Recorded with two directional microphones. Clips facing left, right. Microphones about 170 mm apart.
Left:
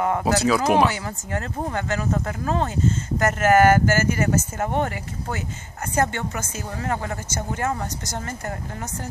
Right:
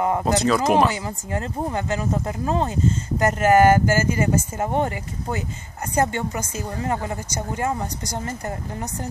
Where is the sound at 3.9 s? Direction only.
15° right (ahead or behind).